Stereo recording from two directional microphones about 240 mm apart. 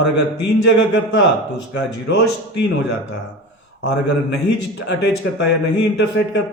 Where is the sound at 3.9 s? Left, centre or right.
Left.